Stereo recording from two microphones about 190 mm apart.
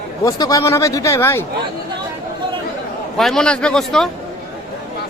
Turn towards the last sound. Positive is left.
turn(degrees=0)  # may be behind; listen again after turning